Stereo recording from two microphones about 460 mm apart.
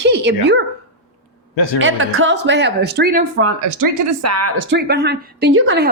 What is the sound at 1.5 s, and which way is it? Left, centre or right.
Speech, left.